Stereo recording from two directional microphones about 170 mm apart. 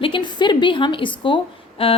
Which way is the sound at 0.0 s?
30° left (ahead or behind).